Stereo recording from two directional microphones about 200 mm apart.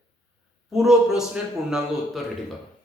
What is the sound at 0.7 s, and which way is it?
A man's voice, centre (ahead or behind).